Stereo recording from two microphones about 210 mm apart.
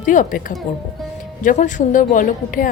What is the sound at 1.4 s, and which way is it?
Speech, 35° left (ahead or behind).